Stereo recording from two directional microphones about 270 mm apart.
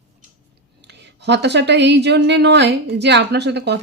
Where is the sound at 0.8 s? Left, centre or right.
Right.